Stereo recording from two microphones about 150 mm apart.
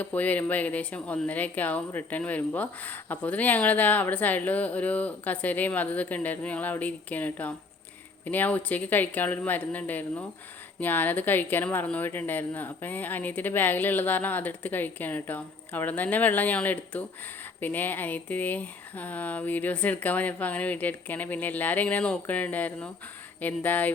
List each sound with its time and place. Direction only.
0.0 s speech: 10° left (ahead or behind)